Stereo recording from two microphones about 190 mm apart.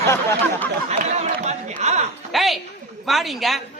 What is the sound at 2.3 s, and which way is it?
A man's voice, centre (ahead or behind).